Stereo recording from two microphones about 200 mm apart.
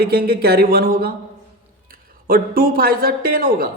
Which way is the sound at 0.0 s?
50° right (ahead or behind).